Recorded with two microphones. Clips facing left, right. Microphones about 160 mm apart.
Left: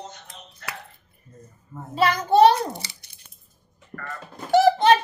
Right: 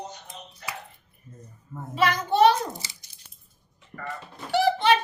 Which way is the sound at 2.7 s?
65° left (ahead or behind).